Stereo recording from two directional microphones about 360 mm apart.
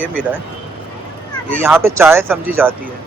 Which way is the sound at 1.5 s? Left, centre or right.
Centre.